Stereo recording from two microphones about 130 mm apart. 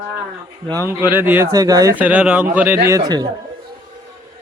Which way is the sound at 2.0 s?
10° right (ahead or behind).